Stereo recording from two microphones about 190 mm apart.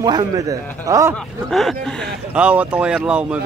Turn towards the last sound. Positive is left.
turn(degrees=-5)  # may be behind; listen again after turning